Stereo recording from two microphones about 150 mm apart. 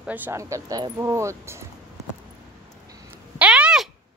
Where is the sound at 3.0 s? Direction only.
10° right (ahead or behind).